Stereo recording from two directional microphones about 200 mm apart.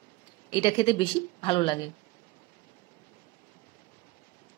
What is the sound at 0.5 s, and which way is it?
A woman's voice, 25° left (ahead or behind).